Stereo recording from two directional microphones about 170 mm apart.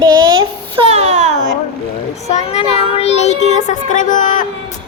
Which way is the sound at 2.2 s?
40° left (ahead or behind).